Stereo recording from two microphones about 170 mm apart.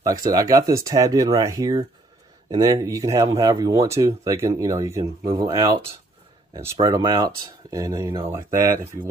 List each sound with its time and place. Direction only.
0.0 s speech: 20° right (ahead or behind)